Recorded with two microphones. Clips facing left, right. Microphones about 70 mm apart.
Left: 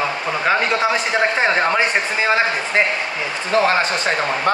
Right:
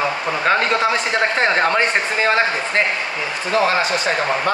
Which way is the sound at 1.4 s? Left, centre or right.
Centre.